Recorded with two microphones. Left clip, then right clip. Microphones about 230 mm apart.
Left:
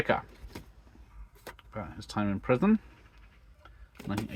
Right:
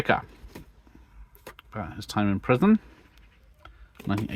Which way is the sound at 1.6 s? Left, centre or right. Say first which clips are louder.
Right 6 dB; right.